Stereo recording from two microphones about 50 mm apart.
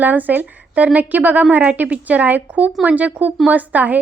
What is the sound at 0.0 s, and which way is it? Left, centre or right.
Speech, right.